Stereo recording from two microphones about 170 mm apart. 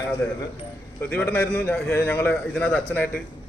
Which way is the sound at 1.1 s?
10° left (ahead or behind).